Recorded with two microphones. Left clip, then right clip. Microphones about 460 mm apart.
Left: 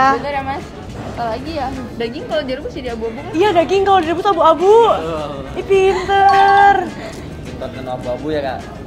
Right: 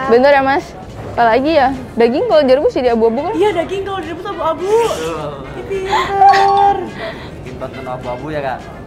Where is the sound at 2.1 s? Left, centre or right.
Right.